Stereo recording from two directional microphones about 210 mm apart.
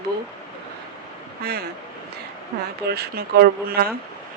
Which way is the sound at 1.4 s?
50° right (ahead or behind).